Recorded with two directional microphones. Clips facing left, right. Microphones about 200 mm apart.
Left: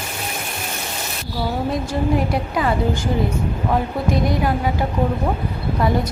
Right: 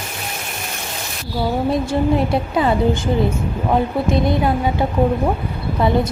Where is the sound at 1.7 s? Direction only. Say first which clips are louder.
Right 3 dB; 25° right (ahead or behind).